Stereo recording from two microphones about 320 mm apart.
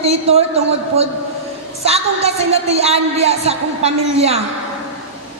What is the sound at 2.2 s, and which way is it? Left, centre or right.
A woman's voice, centre.